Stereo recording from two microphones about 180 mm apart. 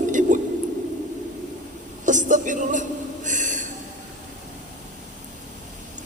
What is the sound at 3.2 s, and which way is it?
Snort, 45° right (ahead or behind).